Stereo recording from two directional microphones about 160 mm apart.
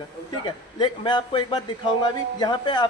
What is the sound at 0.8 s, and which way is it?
Speech, 25° left (ahead or behind).